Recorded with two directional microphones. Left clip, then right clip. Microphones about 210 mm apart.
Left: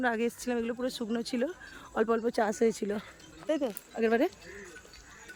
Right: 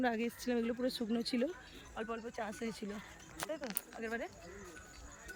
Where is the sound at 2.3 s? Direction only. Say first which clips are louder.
Left 14 dB; 25° left (ahead or behind).